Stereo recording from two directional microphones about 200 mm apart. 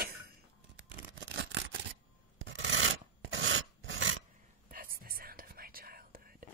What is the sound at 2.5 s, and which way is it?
Filing, 75° right (ahead or behind).